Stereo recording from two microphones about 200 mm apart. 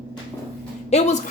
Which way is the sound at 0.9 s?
35° left (ahead or behind).